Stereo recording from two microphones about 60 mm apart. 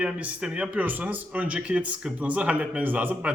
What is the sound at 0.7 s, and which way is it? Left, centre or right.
Speech, right.